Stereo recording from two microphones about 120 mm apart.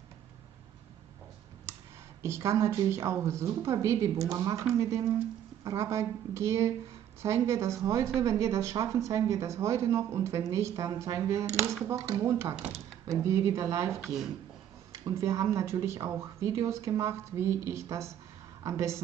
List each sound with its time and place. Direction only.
2.2 s speech: 25° right (ahead or behind)
14.0 s speech: 5° right (ahead or behind)
14.9 s a woman's voice: 25° right (ahead or behind)